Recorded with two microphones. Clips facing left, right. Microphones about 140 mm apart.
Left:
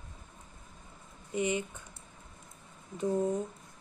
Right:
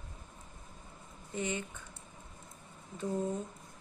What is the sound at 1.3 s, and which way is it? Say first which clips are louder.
Speech: left 5 dB; 15° left (ahead or behind).